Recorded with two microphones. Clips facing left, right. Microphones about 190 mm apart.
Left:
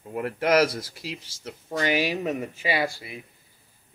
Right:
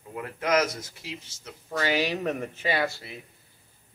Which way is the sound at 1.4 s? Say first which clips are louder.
Left 2 dB; 20° left (ahead or behind).